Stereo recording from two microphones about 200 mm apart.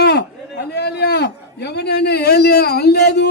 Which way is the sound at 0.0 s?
60° left (ahead or behind).